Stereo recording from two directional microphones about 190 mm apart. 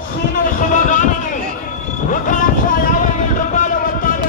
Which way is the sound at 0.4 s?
40° left (ahead or behind).